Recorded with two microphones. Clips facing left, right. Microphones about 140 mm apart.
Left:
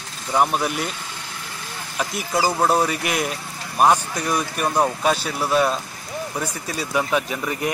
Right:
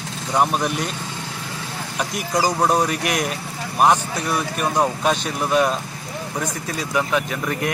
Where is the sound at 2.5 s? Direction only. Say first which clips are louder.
Left 1 dB; 5° left (ahead or behind).